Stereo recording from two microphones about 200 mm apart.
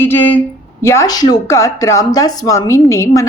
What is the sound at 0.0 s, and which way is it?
A woman's voice, 10° left (ahead or behind).